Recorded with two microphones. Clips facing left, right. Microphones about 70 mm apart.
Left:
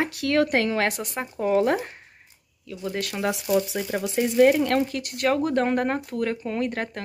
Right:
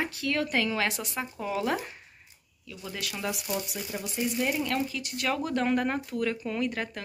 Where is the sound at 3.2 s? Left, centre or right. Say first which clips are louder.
Left 10 dB; left.